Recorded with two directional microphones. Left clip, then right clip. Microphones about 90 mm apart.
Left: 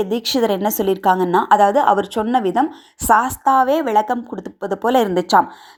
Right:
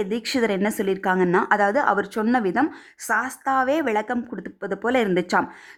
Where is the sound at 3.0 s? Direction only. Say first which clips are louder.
Left 9 dB; 25° left (ahead or behind).